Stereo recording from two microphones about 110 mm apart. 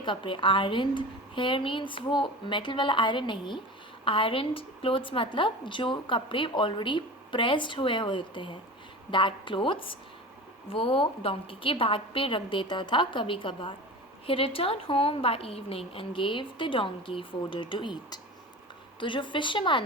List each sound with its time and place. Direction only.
0.0 s a woman's voice: 50° left (ahead or behind)